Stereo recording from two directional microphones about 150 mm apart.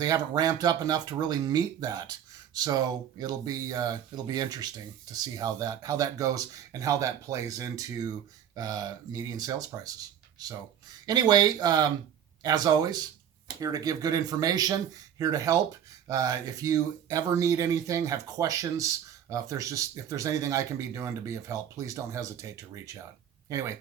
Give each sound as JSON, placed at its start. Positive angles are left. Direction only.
{"t": 0.0, "sound": "speech", "side_deg": -25}